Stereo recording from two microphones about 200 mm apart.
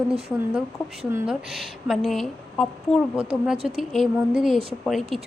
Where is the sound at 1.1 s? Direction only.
Centre (ahead or behind).